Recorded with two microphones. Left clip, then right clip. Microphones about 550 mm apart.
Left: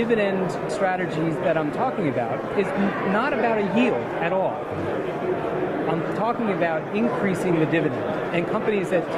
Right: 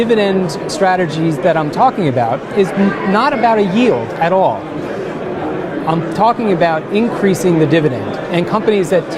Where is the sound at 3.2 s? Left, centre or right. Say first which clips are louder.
Right 11 dB; right.